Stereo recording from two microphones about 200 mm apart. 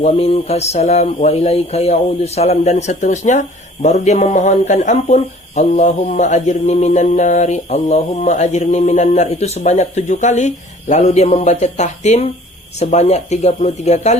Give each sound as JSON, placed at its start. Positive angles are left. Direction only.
{"t": 0.0, "sound": "speech", "side_deg": 30}